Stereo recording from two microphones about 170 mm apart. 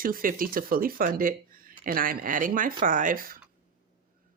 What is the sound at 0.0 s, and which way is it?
Speech, 55° right (ahead or behind).